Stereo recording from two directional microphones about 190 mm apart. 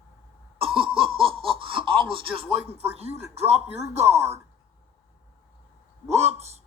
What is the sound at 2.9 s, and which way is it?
Speech, 35° right (ahead or behind).